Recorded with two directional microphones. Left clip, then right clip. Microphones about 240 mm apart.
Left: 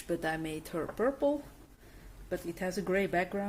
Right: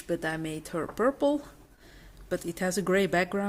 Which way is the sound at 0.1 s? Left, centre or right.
Centre.